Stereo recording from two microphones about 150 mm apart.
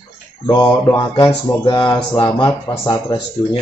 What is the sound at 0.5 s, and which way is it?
Speech, 25° left (ahead or behind).